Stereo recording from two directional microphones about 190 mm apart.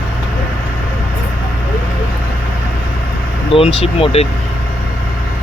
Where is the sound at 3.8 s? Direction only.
30° left (ahead or behind).